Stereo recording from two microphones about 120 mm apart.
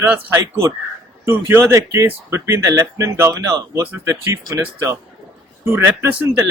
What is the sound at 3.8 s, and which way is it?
Speech, 20° right (ahead or behind).